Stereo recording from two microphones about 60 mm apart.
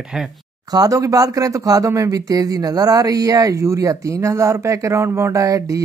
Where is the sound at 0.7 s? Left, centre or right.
Right.